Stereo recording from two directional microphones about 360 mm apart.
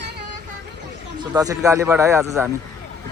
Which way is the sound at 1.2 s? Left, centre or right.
Centre.